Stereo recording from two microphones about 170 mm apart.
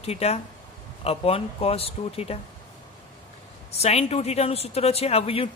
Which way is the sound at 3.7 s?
40° left (ahead or behind).